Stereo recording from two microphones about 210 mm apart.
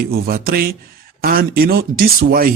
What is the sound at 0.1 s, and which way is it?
Speech, 45° right (ahead or behind).